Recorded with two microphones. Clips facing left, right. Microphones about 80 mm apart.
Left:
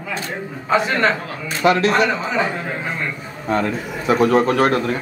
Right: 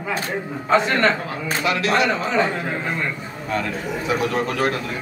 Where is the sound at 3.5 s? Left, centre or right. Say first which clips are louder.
Left 3 dB; left.